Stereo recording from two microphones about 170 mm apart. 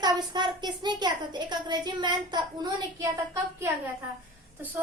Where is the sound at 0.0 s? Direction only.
25° right (ahead or behind).